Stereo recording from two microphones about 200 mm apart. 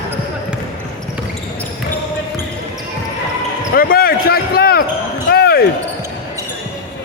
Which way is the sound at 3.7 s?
45° left (ahead or behind).